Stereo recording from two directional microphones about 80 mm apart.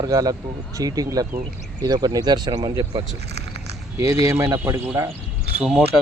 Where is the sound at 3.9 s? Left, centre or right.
Right.